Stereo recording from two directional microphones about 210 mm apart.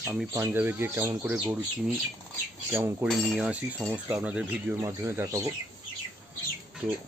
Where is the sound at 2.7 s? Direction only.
10° right (ahead or behind).